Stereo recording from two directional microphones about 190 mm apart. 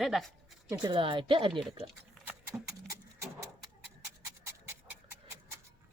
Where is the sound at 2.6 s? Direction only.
15° right (ahead or behind).